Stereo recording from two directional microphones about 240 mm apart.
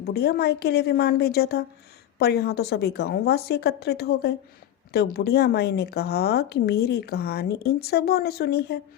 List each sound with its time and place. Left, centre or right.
0.0 s a woman's voice: left